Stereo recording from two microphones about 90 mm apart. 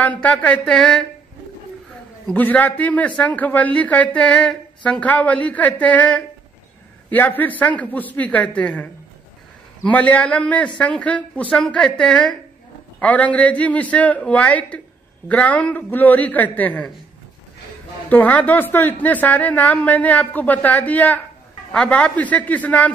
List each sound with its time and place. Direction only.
0.0 s speech: 15° left (ahead or behind)
2.3 s a man's voice: 15° left (ahead or behind)
18.1 s speech: 20° left (ahead or behind)